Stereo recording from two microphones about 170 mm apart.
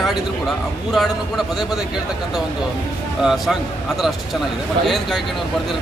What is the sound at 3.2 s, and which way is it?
Speech, centre (ahead or behind).